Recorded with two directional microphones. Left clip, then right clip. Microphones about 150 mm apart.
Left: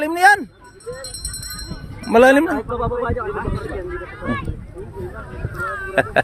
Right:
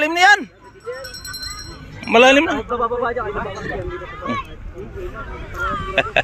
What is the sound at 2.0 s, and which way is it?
Speech, 50° left (ahead or behind).